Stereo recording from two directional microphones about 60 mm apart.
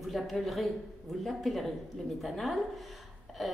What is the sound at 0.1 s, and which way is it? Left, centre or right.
A woman's voice, centre.